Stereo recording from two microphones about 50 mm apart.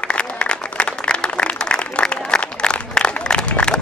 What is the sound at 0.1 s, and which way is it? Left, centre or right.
Applause, left.